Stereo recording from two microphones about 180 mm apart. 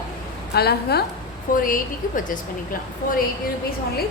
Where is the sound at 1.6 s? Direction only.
50° left (ahead or behind).